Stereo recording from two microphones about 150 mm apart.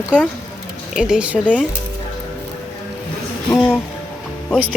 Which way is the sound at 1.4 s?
10° left (ahead or behind).